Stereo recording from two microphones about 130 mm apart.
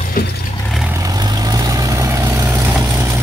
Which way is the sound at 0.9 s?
25° right (ahead or behind).